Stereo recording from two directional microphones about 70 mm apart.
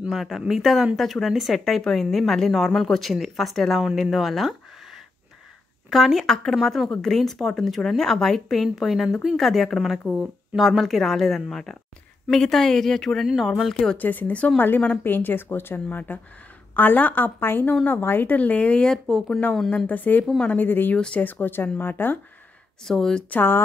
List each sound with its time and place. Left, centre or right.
0.1 s a woman's voice: centre
13.9 s speech: left; by 19.4 s centre
19.9 s speech: left
22.8 s speech: centre
23.3 s speech: left